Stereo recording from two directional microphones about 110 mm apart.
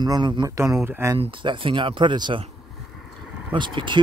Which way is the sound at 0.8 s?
20° right (ahead or behind).